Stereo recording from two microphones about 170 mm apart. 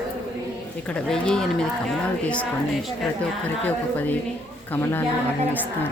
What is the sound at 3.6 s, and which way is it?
Speech, 10° left (ahead or behind).